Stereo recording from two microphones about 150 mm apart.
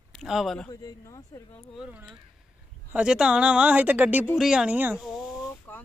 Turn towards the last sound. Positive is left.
turn(degrees=10)  # may be behind; listen again after turning